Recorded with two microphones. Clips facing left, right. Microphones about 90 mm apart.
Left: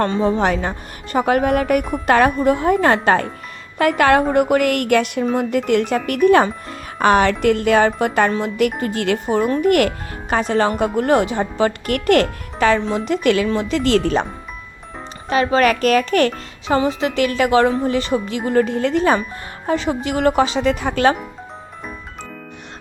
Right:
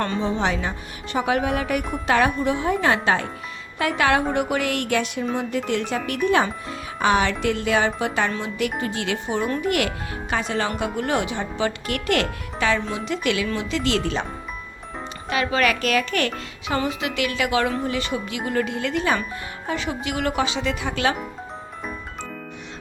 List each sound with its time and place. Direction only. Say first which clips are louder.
0.0 s speech: left 6 dB; 40° left (ahead or behind)
15.3 s speech: left 6 dB; 35° left (ahead or behind)